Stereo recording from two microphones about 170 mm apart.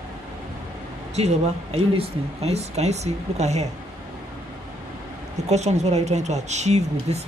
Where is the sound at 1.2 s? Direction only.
40° right (ahead or behind).